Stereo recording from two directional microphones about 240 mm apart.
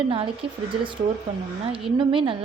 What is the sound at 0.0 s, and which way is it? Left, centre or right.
Speech, right.